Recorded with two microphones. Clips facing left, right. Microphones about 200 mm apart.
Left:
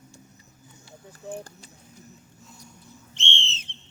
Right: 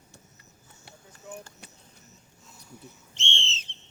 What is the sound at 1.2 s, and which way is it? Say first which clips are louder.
Speech: left 6 dB; 35° left (ahead or behind).